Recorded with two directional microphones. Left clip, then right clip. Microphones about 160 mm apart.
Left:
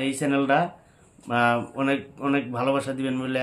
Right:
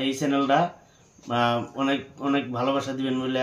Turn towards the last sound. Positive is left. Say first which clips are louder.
# even
turn(degrees=25)  # may be behind; listen again after turning